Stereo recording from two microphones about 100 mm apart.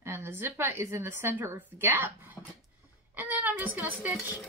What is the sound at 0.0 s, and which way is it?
Speech, 25° right (ahead or behind).